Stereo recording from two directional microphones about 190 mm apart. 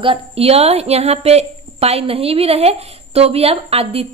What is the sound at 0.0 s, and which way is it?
A woman's voice, 30° right (ahead or behind).